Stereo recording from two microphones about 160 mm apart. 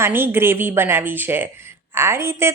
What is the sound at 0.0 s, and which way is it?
A woman's voice, 10° right (ahead or behind).